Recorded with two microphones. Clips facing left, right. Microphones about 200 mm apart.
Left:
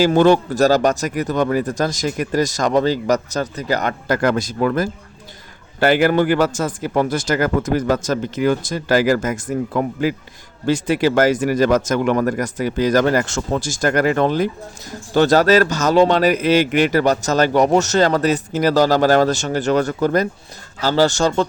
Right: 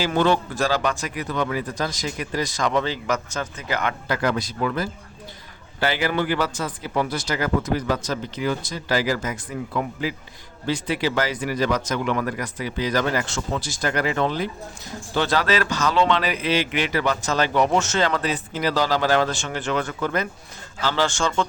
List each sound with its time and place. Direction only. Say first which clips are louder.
0.0 s a man's voice: left 7 dB; 45° left (ahead or behind)